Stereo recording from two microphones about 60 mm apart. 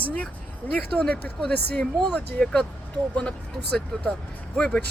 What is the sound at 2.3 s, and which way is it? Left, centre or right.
Speech, centre.